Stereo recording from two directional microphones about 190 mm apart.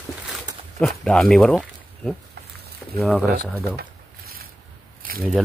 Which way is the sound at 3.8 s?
50° right (ahead or behind).